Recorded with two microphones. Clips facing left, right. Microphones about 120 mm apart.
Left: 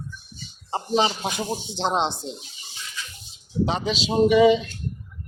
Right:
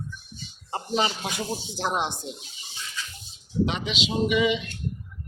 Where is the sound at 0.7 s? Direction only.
25° left (ahead or behind).